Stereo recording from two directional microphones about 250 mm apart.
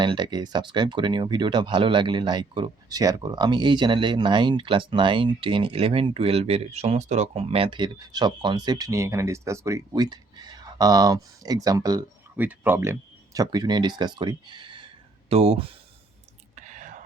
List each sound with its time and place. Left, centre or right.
0.0 s speech: centre
16.6 s whispering: right